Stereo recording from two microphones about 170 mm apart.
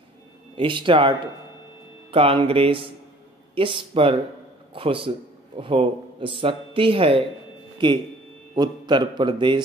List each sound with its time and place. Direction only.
0.6 s a man's voice: 30° right (ahead or behind)